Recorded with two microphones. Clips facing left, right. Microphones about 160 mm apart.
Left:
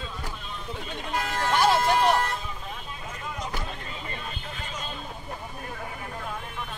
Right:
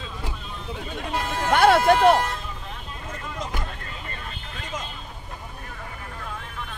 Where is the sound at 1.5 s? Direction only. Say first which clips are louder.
Right 6 dB; 60° right (ahead or behind).